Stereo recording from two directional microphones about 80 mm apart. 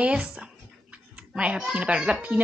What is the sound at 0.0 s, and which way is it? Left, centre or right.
A woman's voice, centre.